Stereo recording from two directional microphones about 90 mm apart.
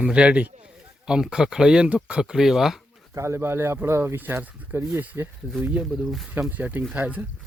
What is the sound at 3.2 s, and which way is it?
Speech, 30° right (ahead or behind).